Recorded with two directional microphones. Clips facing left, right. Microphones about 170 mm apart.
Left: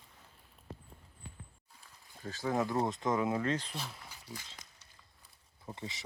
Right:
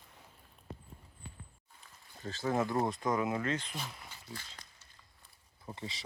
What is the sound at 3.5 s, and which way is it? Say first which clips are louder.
Speech: left 1 dB; 30° left (ahead or behind).